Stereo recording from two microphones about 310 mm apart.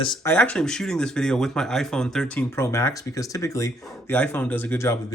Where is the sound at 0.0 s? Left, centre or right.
Centre.